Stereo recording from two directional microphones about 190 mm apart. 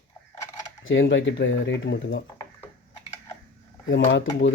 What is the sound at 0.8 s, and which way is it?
Speech, 85° left.